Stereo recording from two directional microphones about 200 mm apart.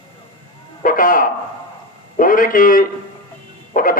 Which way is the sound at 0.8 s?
45° left (ahead or behind).